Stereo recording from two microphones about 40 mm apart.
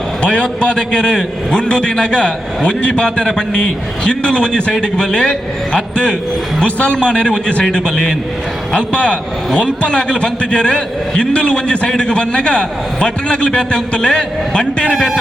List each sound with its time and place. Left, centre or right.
0.2 s a man's voice: left